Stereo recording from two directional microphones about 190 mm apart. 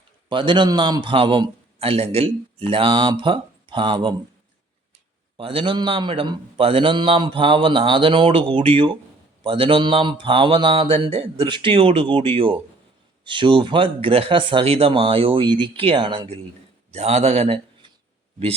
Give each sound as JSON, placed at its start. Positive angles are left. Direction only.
{"t": 0.3, "sound": "a man's voice", "side_deg": -25}
{"t": 5.4, "sound": "a man's voice", "side_deg": -30}